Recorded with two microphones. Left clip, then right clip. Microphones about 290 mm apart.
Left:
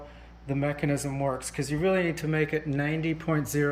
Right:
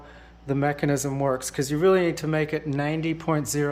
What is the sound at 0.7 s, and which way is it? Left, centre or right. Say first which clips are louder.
Speech: right 4 dB; right.